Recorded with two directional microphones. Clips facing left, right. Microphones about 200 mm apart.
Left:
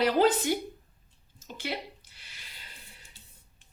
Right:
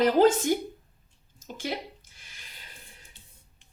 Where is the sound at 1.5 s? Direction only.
45° right (ahead or behind).